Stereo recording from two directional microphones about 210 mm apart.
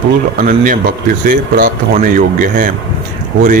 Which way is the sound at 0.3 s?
40° right (ahead or behind).